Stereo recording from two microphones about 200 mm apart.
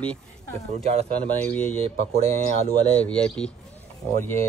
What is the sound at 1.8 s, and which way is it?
Speech, 30° right (ahead or behind).